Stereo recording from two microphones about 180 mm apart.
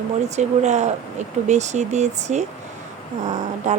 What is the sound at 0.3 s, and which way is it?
Speech, 40° right (ahead or behind).